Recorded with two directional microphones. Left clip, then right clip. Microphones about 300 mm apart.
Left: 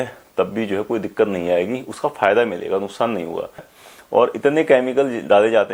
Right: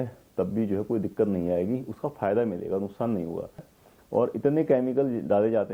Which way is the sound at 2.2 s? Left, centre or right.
Centre.